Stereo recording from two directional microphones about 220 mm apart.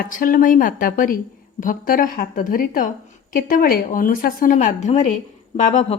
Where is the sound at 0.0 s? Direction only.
40° left (ahead or behind).